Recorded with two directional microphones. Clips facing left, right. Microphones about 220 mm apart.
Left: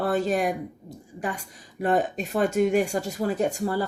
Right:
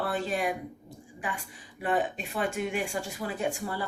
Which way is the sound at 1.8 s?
40° left (ahead or behind).